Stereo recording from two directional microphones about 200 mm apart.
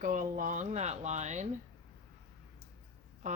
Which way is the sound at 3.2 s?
40° right (ahead or behind).